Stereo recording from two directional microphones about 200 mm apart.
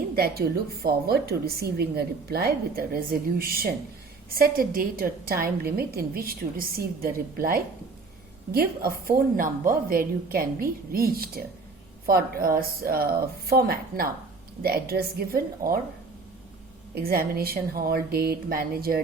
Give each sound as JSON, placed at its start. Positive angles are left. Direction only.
{"t": 0.2, "sound": "a woman's voice", "side_deg": -50}
{"t": 16.9, "sound": "a woman's voice", "side_deg": -50}